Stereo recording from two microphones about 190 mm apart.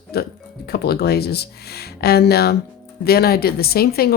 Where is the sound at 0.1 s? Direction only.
55° left (ahead or behind).